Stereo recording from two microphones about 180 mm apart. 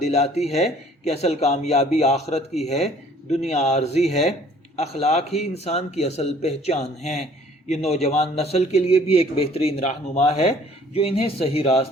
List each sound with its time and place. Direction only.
0.0 s speech: 35° left (ahead or behind)